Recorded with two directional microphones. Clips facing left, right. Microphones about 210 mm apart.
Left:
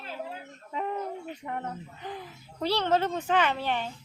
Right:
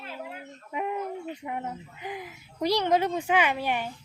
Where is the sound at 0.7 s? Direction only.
10° right (ahead or behind).